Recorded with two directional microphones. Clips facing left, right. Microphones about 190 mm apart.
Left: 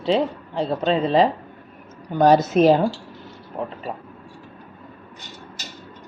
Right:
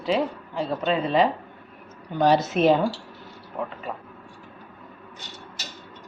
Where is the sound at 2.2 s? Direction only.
45° left (ahead or behind).